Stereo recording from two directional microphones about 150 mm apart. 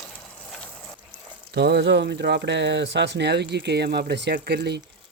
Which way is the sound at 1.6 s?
90° right.